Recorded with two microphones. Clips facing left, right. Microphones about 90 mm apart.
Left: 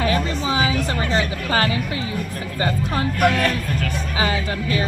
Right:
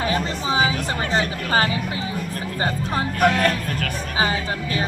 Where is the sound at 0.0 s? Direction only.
30° right (ahead or behind).